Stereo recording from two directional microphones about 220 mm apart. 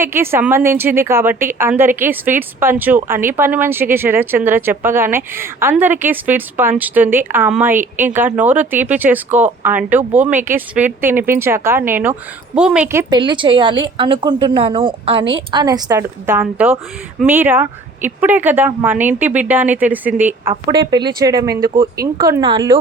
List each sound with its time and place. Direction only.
0.0 s a woman's voice: 10° right (ahead or behind)